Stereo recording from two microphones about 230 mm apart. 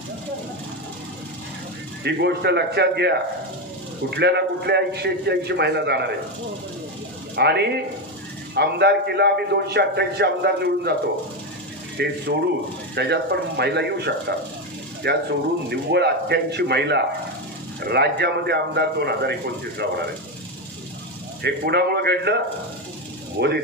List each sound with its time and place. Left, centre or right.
2.0 s a man's voice: right
7.3 s a man's voice: right
12.0 s a man's voice: right
21.4 s a man's voice: right